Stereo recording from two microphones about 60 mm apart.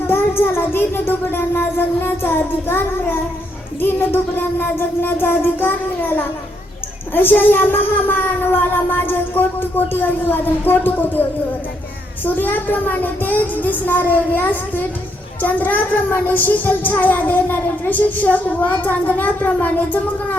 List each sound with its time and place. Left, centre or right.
0.1 s child singing: left
3.8 s speech: left
12.2 s a child's voice: left